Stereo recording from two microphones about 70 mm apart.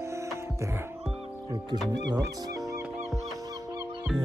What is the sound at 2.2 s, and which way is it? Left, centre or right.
Speech, right.